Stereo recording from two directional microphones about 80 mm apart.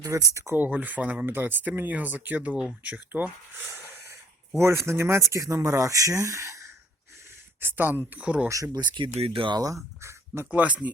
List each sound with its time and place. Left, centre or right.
0.3 s speech: right
0.6 s speech: right
4.1 s a sound: right
5.3 s speech: right
7.6 s speech: right
8.4 s speech: right
8.8 s speech: right
9.6 s speech: right
10.5 s speech: centre